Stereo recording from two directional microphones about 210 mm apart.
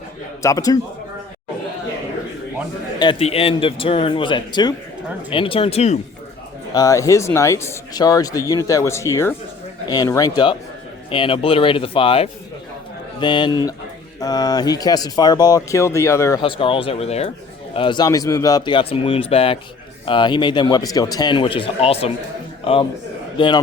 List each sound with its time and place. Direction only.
0.4 s speech: 15° left (ahead or behind)
3.0 s speech: 25° left (ahead or behind)
6.7 s a man's voice: 15° left (ahead or behind)